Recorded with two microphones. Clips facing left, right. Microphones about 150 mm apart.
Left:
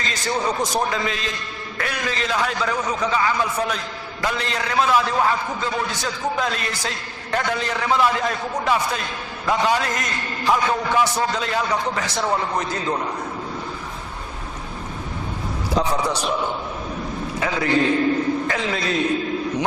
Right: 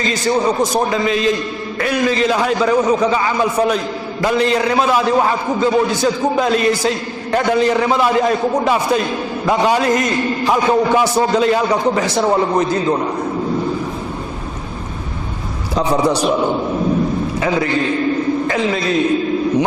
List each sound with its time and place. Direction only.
0.0 s a man's voice: 15° right (ahead or behind)
12.1 s a man's voice: 30° right (ahead or behind)
15.9 s a man's voice: 30° right (ahead or behind)
18.4 s a man's voice: 15° right (ahead or behind)